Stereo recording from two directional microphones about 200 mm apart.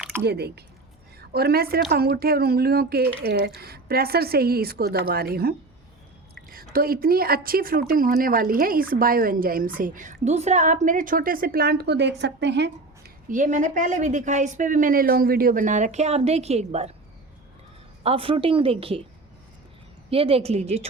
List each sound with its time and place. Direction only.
0.2 s a woman's voice: 55° right (ahead or behind)
6.7 s speech: 45° right (ahead or behind)
13.2 s a woman's voice: 40° right (ahead or behind)
18.0 s a woman's voice: 25° right (ahead or behind)
20.1 s a woman's voice: 30° right (ahead or behind)